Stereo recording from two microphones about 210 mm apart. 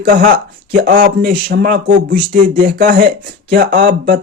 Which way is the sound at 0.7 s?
50° right (ahead or behind).